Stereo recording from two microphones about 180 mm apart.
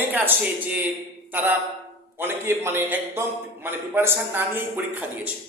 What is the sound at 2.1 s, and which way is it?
A man's voice, 15° right (ahead or behind).